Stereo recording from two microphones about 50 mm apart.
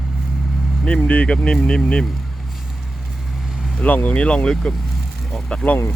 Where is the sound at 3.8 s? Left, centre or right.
Left.